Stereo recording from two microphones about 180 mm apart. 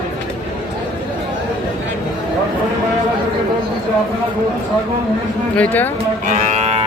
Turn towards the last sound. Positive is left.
turn(degrees=-40)  # may be behind; listen again after turning